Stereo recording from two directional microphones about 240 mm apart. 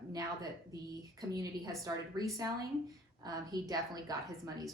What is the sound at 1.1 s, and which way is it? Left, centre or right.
A woman's voice, centre.